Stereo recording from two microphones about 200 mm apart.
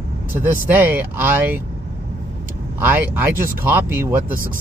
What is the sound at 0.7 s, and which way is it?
Speech, 10° right (ahead or behind).